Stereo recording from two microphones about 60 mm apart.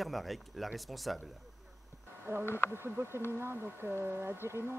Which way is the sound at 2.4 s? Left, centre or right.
Left.